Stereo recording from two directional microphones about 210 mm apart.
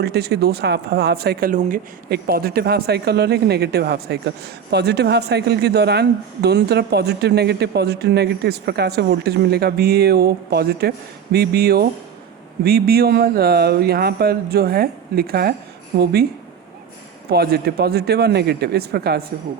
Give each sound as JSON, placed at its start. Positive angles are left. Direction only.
{"t": 0.0, "sound": "speech", "side_deg": -50}
{"t": 17.2, "sound": "speech", "side_deg": -50}